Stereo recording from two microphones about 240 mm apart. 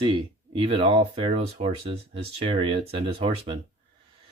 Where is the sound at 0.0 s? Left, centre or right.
Right.